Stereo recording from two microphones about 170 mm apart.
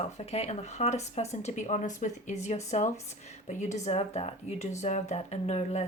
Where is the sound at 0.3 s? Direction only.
40° left (ahead or behind).